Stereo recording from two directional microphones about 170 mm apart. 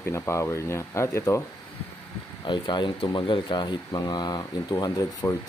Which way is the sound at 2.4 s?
25° left (ahead or behind).